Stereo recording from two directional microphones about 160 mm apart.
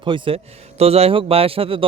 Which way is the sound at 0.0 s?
30° right (ahead or behind).